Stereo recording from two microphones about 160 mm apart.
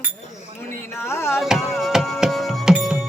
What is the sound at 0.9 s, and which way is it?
Speech, 15° left (ahead or behind).